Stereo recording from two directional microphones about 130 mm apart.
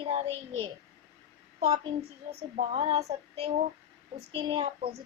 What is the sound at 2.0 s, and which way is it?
A woman's voice, 50° right (ahead or behind).